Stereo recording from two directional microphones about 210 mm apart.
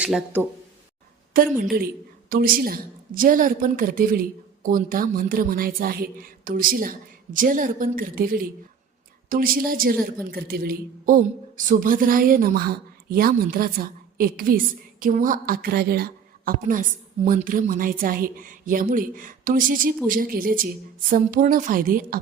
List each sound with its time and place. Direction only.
0.0 s speech: 5° right (ahead or behind)
2.3 s a woman's voice: 40° right (ahead or behind)